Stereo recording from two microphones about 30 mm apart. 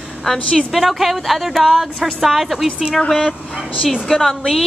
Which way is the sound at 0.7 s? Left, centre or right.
Centre.